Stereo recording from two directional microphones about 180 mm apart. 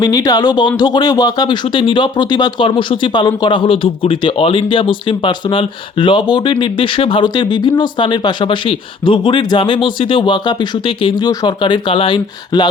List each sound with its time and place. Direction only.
0.0 s speech: 20° left (ahead or behind)